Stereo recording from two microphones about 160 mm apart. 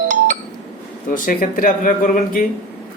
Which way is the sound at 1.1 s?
60° left (ahead or behind).